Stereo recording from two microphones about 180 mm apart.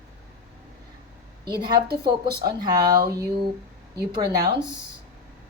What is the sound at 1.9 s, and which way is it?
Speech, 60° right (ahead or behind).